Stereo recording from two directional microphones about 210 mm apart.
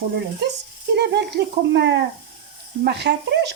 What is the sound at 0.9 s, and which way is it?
Speech, 55° right (ahead or behind).